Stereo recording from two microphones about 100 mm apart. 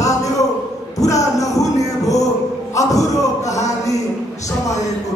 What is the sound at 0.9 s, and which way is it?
Music, 35° left (ahead or behind).